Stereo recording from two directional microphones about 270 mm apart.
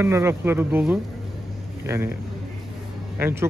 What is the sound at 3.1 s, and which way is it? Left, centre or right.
Speech, centre.